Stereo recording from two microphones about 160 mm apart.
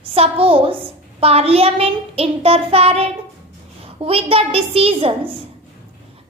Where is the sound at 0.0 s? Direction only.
35° right (ahead or behind).